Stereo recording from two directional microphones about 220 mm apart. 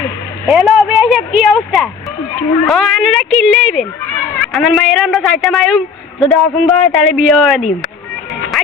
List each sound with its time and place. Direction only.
0.4 s a man's voice: centre (ahead or behind)
8.3 s music: centre (ahead or behind)